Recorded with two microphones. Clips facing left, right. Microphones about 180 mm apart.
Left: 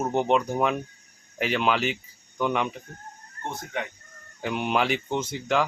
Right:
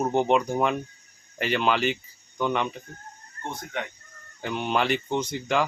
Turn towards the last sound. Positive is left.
turn(degrees=5)  # may be behind; listen again after turning